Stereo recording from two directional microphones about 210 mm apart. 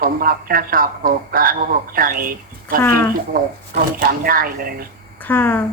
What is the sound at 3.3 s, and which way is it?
A woman's voice, 45° right (ahead or behind).